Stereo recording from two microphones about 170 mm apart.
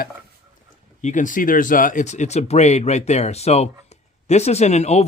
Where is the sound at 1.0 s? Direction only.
45° left (ahead or behind).